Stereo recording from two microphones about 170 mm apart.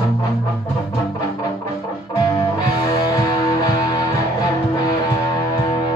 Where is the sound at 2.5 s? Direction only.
20° left (ahead or behind).